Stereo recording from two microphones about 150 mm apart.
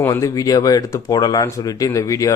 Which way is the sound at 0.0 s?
20° left (ahead or behind).